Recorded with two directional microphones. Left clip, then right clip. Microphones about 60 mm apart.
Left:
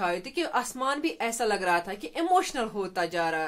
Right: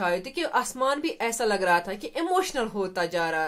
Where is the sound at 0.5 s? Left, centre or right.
Right.